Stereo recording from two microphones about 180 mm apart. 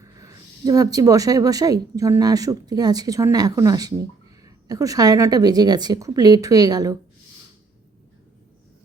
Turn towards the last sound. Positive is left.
turn(degrees=-20)  # may be behind; listen again after turning